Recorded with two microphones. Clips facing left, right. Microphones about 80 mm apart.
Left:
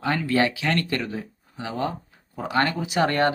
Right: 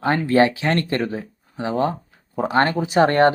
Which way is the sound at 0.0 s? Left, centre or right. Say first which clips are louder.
Right 6 dB; right.